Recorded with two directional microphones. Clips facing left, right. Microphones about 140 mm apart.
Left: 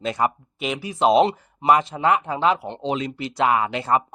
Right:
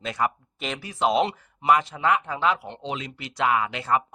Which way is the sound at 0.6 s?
10° left (ahead or behind).